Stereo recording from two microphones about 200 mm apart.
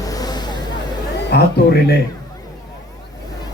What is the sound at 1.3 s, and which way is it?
Speech, 55° left (ahead or behind).